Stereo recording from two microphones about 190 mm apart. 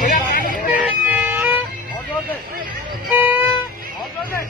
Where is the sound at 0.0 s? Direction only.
45° left (ahead or behind).